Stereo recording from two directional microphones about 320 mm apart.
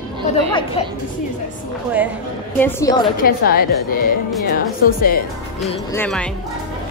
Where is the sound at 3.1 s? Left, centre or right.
Left.